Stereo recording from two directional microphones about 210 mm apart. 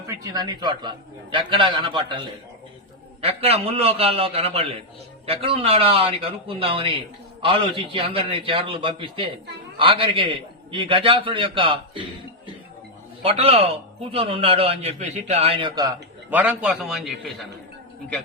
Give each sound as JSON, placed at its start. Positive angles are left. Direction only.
{"t": 0.1, "sound": "a man's voice", "side_deg": -15}
{"t": 3.2, "sound": "a man's voice", "side_deg": -30}
{"t": 13.2, "sound": "a man's voice", "side_deg": -30}